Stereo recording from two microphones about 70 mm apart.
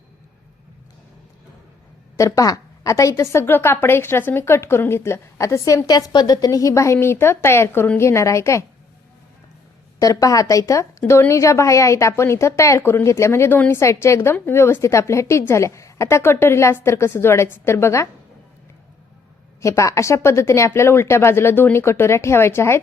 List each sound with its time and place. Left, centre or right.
2.1 s a woman's voice: left
3.2 s speech: left
5.9 s a woman's voice: left
10.0 s a woman's voice: left
12.8 s a woman's voice: left
19.6 s speech: left